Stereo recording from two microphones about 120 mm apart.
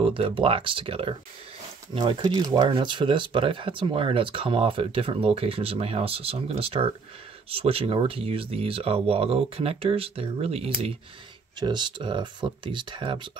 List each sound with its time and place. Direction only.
0.0 s speech: 50° right (ahead or behind)
11.6 s speech: 40° right (ahead or behind)